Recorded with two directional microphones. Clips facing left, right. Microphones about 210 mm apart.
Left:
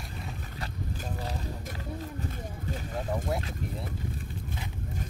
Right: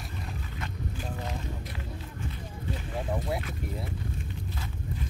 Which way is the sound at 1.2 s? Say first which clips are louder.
Even; 35° left (ahead or behind).